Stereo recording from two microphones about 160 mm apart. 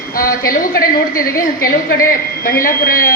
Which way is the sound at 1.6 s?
60° left (ahead or behind).